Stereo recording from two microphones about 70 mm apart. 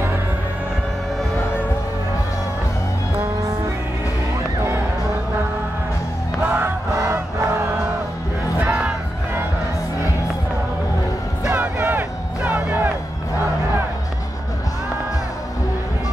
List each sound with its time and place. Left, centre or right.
6.5 s music: right
11.5 s music: right